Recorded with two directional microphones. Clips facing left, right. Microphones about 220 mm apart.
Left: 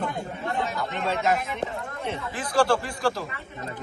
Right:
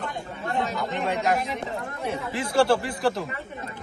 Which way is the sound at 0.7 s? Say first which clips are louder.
Right 1 dB; 15° right (ahead or behind).